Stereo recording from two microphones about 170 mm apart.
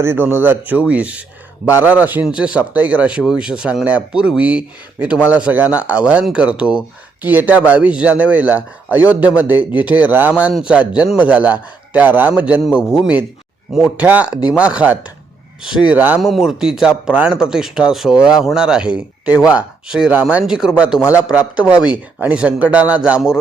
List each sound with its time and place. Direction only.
0.0 s a man's voice: 15° right (ahead or behind)